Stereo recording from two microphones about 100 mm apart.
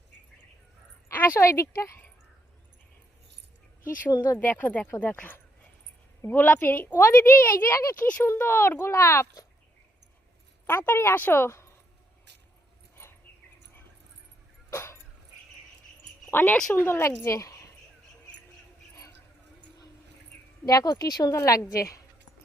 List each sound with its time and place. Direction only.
1.0 s speech: 20° left (ahead or behind)
4.1 s speech: 40° left (ahead or behind)
4.4 s speech: 20° left (ahead or behind)
7.9 s speech: 15° left (ahead or behind)
10.7 s speech: 20° left (ahead or behind)
14.7 s a sound: 30° left (ahead or behind)
16.3 s speech: 20° left (ahead or behind)
20.3 s a sound: 15° left (ahead or behind)
20.7 s speech: 35° left (ahead or behind)